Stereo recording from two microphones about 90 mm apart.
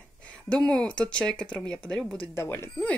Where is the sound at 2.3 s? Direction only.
30° left (ahead or behind).